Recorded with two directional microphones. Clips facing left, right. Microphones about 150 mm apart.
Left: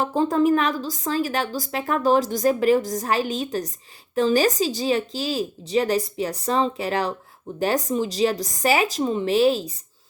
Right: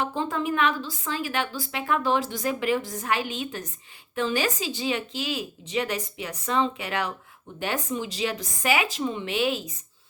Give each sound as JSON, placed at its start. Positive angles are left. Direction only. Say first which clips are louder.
{"t": 0.0, "sound": "a woman's voice", "louder": "left 8 dB", "side_deg": 40}